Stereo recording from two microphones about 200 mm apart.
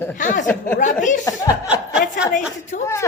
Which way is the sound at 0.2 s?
40° left (ahead or behind).